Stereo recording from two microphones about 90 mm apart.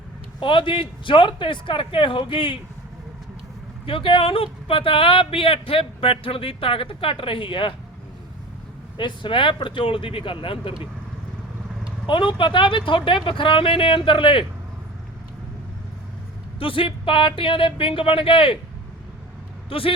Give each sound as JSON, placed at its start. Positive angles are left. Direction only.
{"t": 0.3, "sound": "speech", "side_deg": 65}
{"t": 3.8, "sound": "speech", "side_deg": 80}
{"t": 9.0, "sound": "speech", "side_deg": 65}
{"t": 12.0, "sound": "speech", "side_deg": 70}
{"t": 16.6, "sound": "speech", "side_deg": 85}
{"t": 19.7, "sound": "speech", "side_deg": 90}